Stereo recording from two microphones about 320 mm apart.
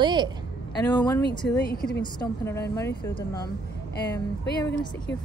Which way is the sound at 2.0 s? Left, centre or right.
Centre.